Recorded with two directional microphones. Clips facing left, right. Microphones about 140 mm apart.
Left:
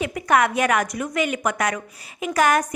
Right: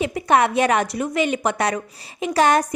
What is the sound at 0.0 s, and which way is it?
A woman's voice, 25° right (ahead or behind).